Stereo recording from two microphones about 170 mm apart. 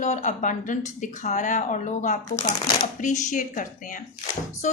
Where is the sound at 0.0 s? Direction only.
45° left (ahead or behind).